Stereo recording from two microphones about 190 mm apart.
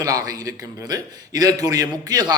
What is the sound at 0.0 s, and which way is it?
A man's voice, 20° right (ahead or behind).